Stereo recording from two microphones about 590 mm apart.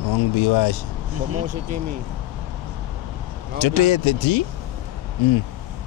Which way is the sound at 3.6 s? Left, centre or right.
Left.